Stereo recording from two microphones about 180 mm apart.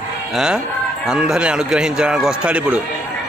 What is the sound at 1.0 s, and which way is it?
A man's voice, 5° right (ahead or behind).